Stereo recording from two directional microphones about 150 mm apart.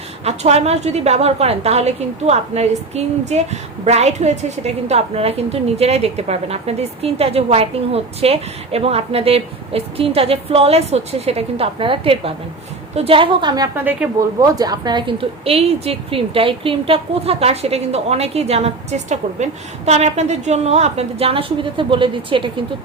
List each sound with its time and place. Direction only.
0.3 s a woman's voice: 45° right (ahead or behind)